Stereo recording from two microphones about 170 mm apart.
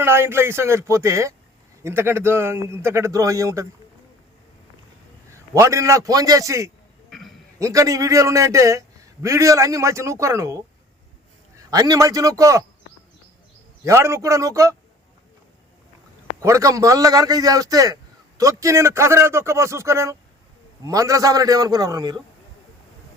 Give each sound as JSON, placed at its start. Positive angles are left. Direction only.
{"t": 0.0, "sound": "a man's voice", "side_deg": -15}
{"t": 5.5, "sound": "a man's voice", "side_deg": -15}
{"t": 7.1, "sound": "a sound", "side_deg": 0}
{"t": 7.6, "sound": "a man's voice", "side_deg": -20}
{"t": 11.7, "sound": "a man's voice", "side_deg": -20}
{"t": 13.8, "sound": "a man's voice", "side_deg": -15}
{"t": 16.4, "sound": "a man's voice", "side_deg": -15}